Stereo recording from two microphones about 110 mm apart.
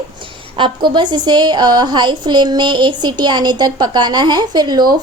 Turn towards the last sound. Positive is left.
turn(degrees=-40)  # may be behind; listen again after turning